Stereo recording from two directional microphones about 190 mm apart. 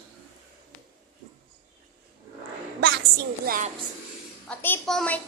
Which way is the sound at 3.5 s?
45° right (ahead or behind).